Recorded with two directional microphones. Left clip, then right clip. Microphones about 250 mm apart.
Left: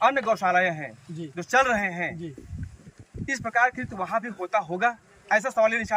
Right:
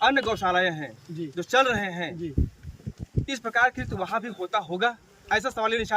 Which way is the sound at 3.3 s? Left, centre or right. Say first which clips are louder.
Even; centre.